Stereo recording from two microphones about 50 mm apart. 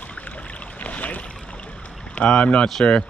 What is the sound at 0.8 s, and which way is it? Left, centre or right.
Boat, left.